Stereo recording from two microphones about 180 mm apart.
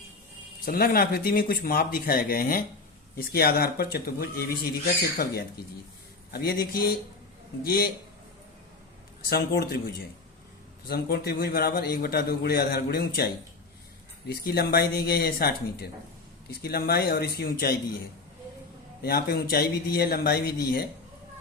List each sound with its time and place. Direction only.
0.6 s a man's voice: 55° left (ahead or behind)
9.3 s a man's voice: 55° left (ahead or behind)
19.0 s a man's voice: 60° left (ahead or behind)